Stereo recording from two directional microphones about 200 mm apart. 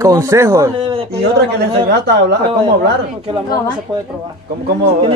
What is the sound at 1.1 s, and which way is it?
Speech, 55° right (ahead or behind).